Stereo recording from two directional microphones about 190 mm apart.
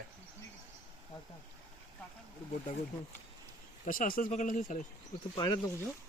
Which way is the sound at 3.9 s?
45° left (ahead or behind).